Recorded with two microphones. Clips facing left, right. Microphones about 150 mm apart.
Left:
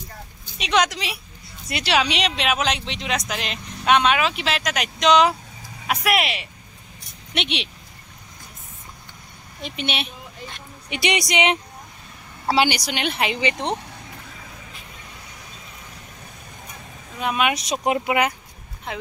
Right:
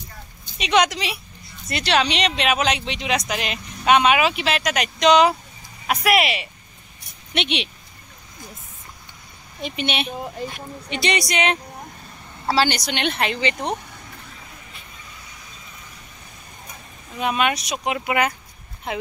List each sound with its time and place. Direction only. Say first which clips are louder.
0.6 s speech: right 2 dB; centre (ahead or behind)
9.6 s speech: right 3 dB; centre (ahead or behind)
10.4 s speech: right 5 dB; 35° right (ahead or behind)
10.9 s speech: even; 15° left (ahead or behind)
17.2 s speech: right 1 dB; centre (ahead or behind)
18.0 s speech: left 1 dB; 15° left (ahead or behind)